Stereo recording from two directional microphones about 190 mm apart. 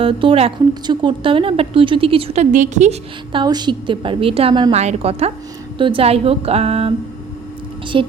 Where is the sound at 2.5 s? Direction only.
40° right (ahead or behind).